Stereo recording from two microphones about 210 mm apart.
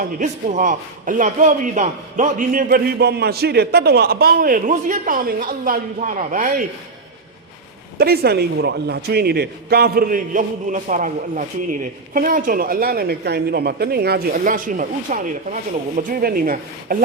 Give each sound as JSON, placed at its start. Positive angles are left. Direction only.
{"t": 0.0, "sound": "a man's voice", "side_deg": -40}
{"t": 7.9, "sound": "a man's voice", "side_deg": -50}